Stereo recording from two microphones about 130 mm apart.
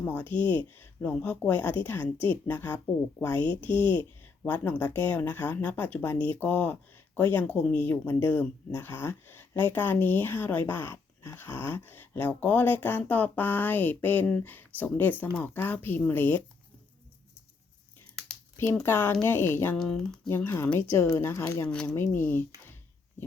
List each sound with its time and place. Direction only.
0.0 s speech: 15° left (ahead or behind)
3.4 s speech: 40° right (ahead or behind)
4.4 s speech: 15° left (ahead or behind)
18.5 s speech: 20° left (ahead or behind)
19.7 s speech: 5° left (ahead or behind)
20.2 s speech: 20° left (ahead or behind)